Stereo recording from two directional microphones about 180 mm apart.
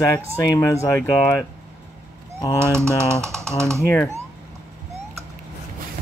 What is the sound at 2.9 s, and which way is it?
Speech, 15° right (ahead or behind).